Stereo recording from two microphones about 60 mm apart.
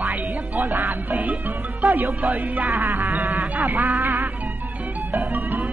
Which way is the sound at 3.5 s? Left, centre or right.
Right.